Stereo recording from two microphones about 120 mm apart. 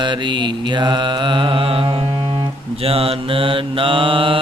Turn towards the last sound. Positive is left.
turn(degrees=-45)  # may be behind; listen again after turning